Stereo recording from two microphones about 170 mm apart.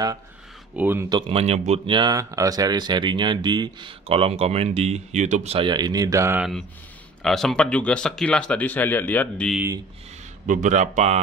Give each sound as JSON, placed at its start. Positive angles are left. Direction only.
{"t": 0.7, "sound": "speech", "side_deg": -10}
{"t": 1.0, "sound": "speech", "side_deg": -25}
{"t": 7.2, "sound": "speech", "side_deg": 5}
{"t": 10.4, "sound": "speech", "side_deg": -50}